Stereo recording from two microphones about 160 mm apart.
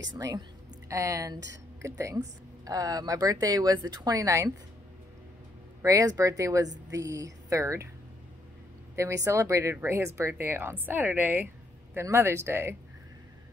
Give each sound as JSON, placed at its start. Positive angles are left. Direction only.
{"t": 0.2, "sound": "speech", "side_deg": -25}
{"t": 5.8, "sound": "speech", "side_deg": -20}
{"t": 8.9, "sound": "speech", "side_deg": -20}